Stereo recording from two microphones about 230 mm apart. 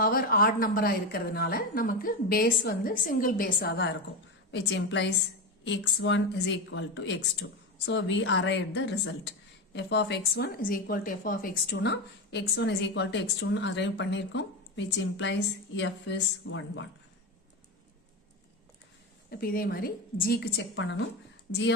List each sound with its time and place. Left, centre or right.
0.0 s a woman's voice: left
19.3 s a woman's voice: left